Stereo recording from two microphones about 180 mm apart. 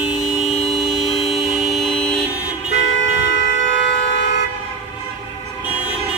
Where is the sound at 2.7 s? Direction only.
90° left.